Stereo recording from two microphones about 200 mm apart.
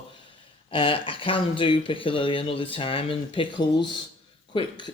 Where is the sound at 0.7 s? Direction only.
25° left (ahead or behind).